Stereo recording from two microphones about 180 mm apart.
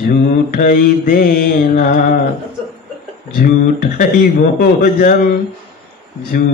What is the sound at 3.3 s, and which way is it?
Mantra, 50° left (ahead or behind).